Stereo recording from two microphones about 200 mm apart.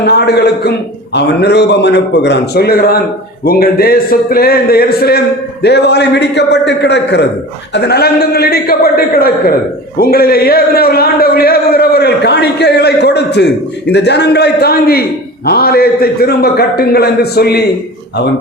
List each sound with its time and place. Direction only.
0.0 s a man's voice: 55° left (ahead or behind)